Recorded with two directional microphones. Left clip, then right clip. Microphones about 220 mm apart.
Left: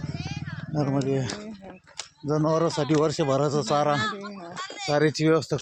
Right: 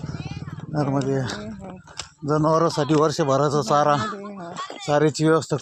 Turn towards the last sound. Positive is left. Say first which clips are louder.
# right 3 dB
turn(degrees=-10)  # may be behind; listen again after turning